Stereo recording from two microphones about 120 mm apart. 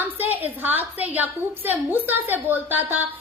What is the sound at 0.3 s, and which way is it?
A woman's voice, 15° right (ahead or behind).